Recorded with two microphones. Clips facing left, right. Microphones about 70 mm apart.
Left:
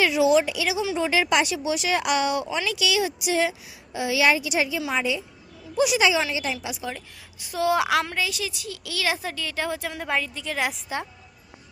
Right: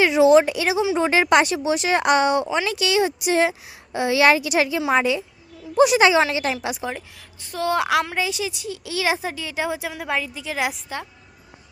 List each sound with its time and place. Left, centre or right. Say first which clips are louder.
0.0 s a sound: right 5 dB; right
0.3 s a woman's voice: right 5 dB; right
5.7 s speech: right 6 dB; right
7.3 s a woman's voice: even; centre
8.1 s a woman's voice: right 3 dB; right
9.9 s a woman's voice: right 1 dB; centre